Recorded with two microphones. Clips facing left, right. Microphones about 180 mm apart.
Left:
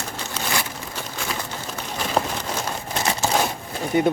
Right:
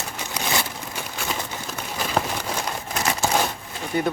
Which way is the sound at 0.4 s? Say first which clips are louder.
Right 1 dB; 10° right (ahead or behind).